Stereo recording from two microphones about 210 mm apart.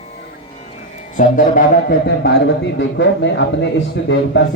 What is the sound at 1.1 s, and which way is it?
A man's voice, 40° left (ahead or behind).